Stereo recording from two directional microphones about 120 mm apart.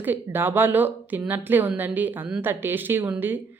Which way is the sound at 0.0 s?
15° right (ahead or behind).